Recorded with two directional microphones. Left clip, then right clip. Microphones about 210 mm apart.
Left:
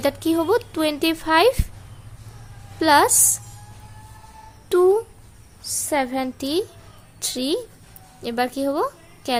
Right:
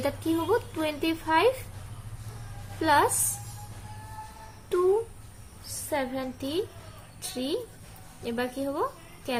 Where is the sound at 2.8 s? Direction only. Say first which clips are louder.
Left 7 dB; 50° left (ahead or behind).